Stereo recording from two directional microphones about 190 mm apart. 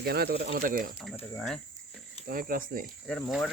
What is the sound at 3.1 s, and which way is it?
Speech, centre (ahead or behind).